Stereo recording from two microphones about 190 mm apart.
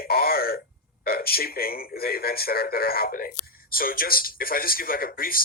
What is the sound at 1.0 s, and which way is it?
Speech, 55° left (ahead or behind).